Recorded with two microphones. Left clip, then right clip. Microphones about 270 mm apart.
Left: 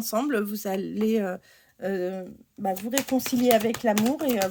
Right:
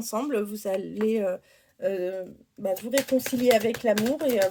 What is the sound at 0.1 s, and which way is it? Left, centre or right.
Speech, left.